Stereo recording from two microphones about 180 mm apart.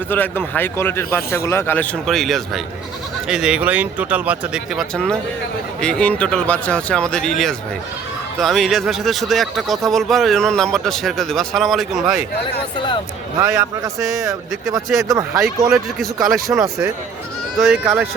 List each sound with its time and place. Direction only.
0.1 s a man's voice: 10° left (ahead or behind)
13.4 s a man's voice: 15° right (ahead or behind)
14.8 s speech: centre (ahead or behind)
15.1 s a man's voice: 15° right (ahead or behind)
15.4 s a man's voice: centre (ahead or behind)